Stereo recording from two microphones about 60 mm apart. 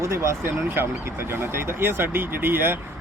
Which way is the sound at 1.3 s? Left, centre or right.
Right.